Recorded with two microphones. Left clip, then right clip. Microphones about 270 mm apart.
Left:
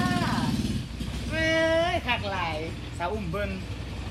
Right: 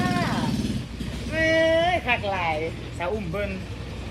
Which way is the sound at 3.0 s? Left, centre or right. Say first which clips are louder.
Right 2 dB; centre.